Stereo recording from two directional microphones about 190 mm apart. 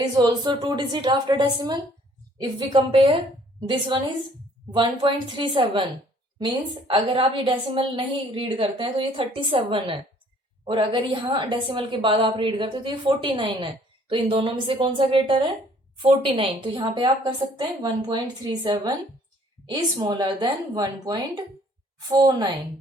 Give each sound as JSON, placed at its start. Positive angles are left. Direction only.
{"t": 0.2, "sound": "a woman's voice", "side_deg": -25}